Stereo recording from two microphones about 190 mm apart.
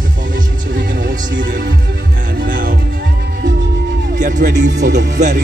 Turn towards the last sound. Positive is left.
turn(degrees=-40)  # may be behind; listen again after turning